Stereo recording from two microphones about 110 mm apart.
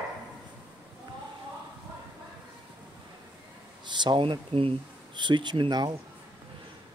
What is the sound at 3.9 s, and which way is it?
Speech, 45° right (ahead or behind).